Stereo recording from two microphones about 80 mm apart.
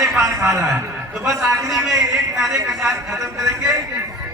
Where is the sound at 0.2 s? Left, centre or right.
Right.